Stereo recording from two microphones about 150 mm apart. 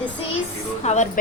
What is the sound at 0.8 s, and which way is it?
Speech, 50° left (ahead or behind).